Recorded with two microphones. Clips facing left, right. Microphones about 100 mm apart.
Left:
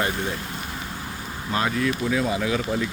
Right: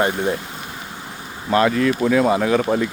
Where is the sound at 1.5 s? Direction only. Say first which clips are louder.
Right 8 dB; 80° right; by 2.9 s 55° right (ahead or behind).